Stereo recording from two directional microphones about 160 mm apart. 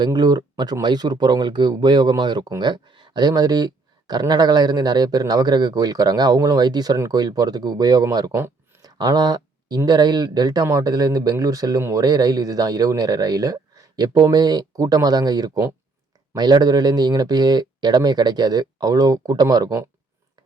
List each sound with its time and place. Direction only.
0.0 s speech: 25° right (ahead or behind)